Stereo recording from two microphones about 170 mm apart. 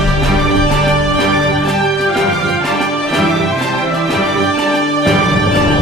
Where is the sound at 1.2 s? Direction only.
Centre (ahead or behind).